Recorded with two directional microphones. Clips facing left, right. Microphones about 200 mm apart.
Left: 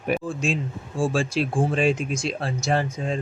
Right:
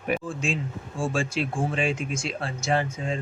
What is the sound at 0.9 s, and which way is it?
Speech, 35° left (ahead or behind).